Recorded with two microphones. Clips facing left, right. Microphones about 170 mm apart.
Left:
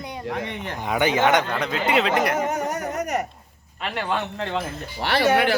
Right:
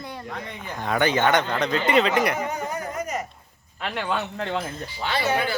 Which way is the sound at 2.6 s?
75° left (ahead or behind).